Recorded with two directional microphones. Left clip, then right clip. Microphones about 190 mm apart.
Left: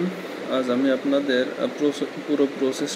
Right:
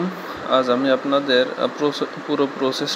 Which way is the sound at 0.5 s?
15° right (ahead or behind).